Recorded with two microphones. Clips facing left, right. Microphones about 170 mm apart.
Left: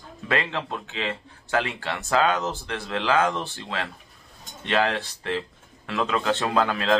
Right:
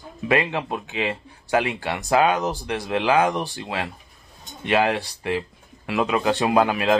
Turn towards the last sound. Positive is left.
turn(degrees=-15)  # may be behind; listen again after turning